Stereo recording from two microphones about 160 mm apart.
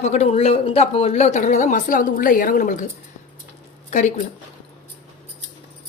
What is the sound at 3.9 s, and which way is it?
Speech, 50° left (ahead or behind).